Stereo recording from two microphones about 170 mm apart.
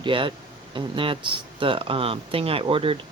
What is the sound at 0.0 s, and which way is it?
Speech, 30° right (ahead or behind).